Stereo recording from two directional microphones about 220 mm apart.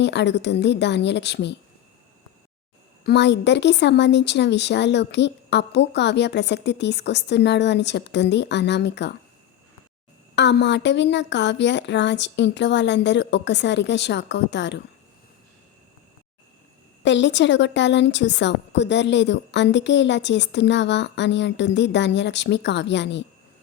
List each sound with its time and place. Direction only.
0.0 s a woman's voice: 50° left (ahead or behind)
3.0 s a woman's voice: 50° left (ahead or behind)
10.3 s a woman's voice: 50° left (ahead or behind)
17.0 s a woman's voice: 55° left (ahead or behind)